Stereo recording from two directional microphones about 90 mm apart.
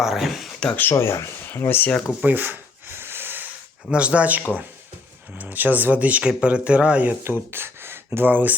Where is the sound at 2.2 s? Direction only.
20° right (ahead or behind).